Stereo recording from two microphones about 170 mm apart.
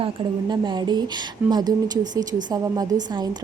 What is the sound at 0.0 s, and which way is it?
A woman's voice, 25° right (ahead or behind).